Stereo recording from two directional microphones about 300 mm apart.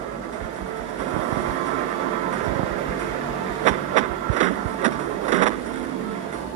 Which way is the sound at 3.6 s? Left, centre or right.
Right.